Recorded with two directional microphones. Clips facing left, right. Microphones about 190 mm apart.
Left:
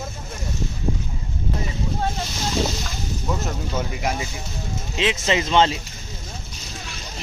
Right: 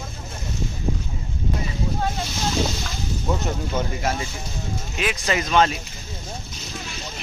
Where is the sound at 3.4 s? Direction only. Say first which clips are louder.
Right 1 dB; 10° left (ahead or behind).